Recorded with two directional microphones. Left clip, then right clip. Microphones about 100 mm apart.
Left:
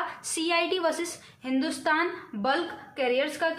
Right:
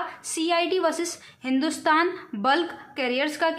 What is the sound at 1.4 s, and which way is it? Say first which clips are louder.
A woman's voice: right 4 dB; 55° right (ahead or behind).